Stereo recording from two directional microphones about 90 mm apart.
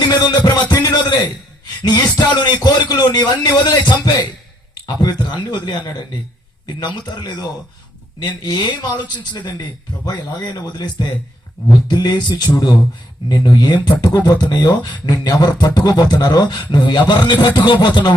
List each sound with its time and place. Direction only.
0.0 s music: 50° left (ahead or behind)
0.7 s a sound: 50° left (ahead or behind)
1.9 s speech: 50° left (ahead or behind)